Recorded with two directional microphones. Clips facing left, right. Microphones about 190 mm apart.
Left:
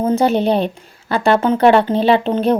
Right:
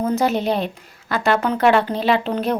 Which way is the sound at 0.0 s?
25° left (ahead or behind).